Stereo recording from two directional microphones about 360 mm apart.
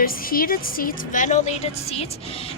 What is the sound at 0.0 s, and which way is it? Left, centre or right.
A woman's voice, left.